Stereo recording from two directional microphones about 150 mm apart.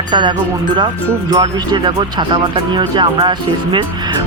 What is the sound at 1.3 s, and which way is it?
Speech, 25° right (ahead or behind).